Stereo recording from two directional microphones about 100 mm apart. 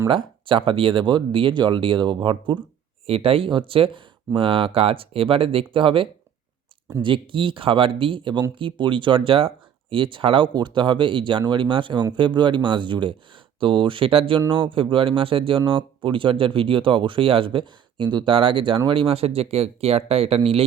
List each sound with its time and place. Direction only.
0.1 s speech: 60° right (ahead or behind)
3.1 s speech: 70° right (ahead or behind)